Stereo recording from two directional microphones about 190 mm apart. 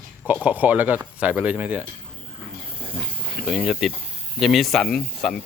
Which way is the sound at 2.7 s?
30° right (ahead or behind).